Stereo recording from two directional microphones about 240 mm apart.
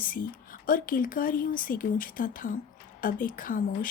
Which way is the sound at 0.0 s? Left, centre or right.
Left.